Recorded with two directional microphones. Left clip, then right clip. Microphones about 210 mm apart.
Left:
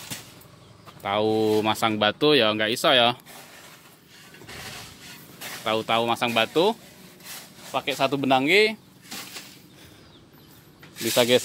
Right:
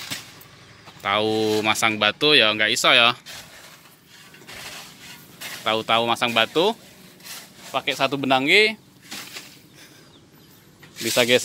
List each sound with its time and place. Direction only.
1.0 s speech: 5° left (ahead or behind)
5.6 s speech: centre (ahead or behind)
11.1 s speech: 5° left (ahead or behind)